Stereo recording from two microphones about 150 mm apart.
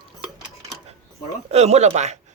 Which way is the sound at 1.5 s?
45° right (ahead or behind).